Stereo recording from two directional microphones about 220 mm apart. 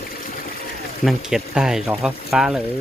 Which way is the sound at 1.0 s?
Centre (ahead or behind).